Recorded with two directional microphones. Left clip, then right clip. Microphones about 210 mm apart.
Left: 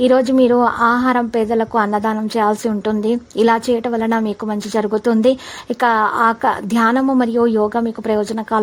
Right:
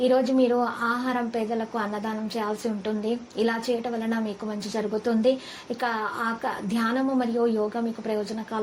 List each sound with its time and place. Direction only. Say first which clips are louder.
0.0 s a woman's voice: left 9 dB; 45° left (ahead or behind)